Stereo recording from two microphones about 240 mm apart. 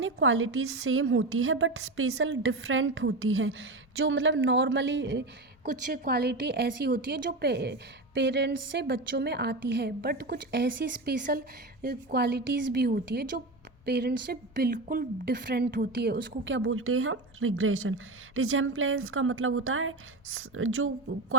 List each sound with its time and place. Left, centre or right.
0.0 s a woman's voice: right